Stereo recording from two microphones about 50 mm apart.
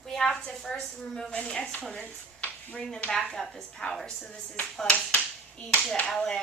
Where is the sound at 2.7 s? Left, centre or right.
Centre.